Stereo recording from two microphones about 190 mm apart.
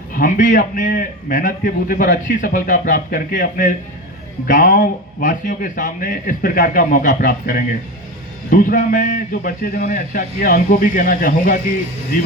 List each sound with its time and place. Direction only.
0.1 s a man's voice: 45° left (ahead or behind)